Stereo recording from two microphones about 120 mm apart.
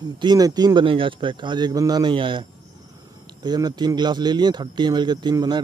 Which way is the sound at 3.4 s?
35° right (ahead or behind).